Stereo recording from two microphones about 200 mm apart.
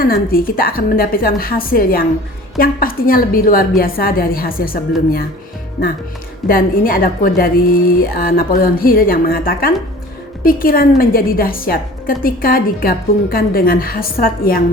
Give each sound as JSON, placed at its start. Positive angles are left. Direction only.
{"t": 0.0, "sound": "a woman's voice", "side_deg": 45}
{"t": 6.5, "sound": "a woman's voice", "side_deg": 45}